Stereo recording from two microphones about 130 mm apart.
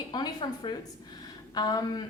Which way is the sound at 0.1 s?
35° left (ahead or behind).